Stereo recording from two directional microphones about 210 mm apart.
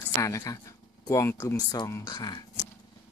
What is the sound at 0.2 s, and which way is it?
Speech, 15° left (ahead or behind).